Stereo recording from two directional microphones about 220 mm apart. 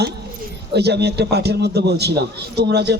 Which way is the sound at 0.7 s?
50° right (ahead or behind).